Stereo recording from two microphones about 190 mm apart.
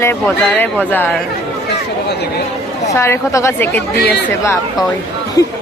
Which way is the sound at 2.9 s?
15° left (ahead or behind).